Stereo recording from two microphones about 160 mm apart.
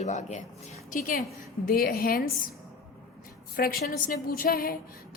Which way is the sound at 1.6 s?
65° left (ahead or behind).